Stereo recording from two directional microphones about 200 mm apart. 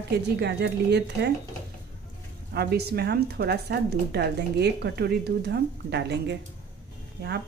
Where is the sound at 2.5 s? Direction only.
55° right (ahead or behind).